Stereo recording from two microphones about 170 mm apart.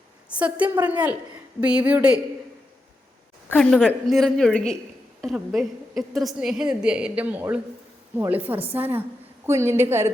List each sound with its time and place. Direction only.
0.3 s a woman's voice: 5° right (ahead or behind)
3.5 s a woman's voice: 5° left (ahead or behind); by 10.1 s 15° right (ahead or behind)